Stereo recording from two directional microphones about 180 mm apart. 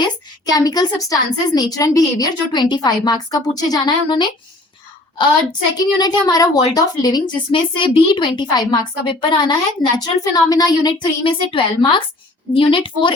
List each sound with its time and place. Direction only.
0.0 s a woman's voice: 20° left (ahead or behind)